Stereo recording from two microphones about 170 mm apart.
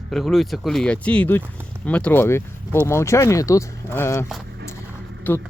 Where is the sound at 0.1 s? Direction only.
Centre (ahead or behind).